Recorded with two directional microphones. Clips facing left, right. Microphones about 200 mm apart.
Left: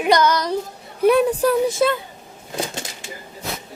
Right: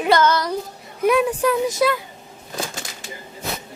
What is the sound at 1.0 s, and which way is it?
Speech, 35° left (ahead or behind).